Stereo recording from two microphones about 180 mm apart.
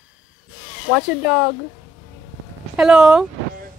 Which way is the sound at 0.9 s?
Centre (ahead or behind).